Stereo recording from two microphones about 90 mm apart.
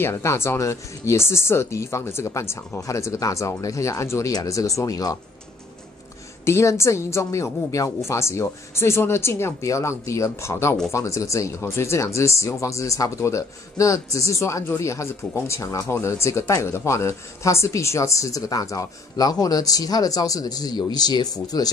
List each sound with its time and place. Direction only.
0.0 s speech: 30° left (ahead or behind)
6.4 s speech: 30° left (ahead or behind)